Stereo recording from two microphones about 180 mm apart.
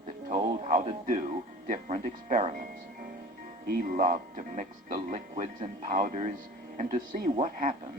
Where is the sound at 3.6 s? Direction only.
50° right (ahead or behind).